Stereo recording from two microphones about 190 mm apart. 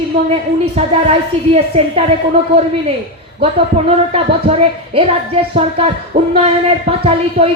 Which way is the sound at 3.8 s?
30° right (ahead or behind).